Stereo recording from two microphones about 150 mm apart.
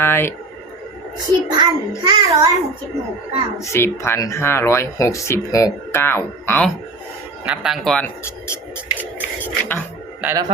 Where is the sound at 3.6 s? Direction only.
20° left (ahead or behind).